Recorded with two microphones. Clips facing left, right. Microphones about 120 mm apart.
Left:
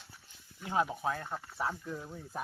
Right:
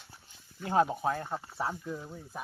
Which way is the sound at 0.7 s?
35° right (ahead or behind).